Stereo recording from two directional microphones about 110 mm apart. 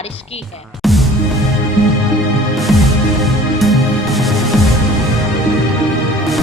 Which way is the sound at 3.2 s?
Centre (ahead or behind).